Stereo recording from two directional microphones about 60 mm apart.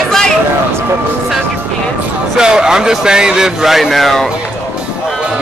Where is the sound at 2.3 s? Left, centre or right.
Centre.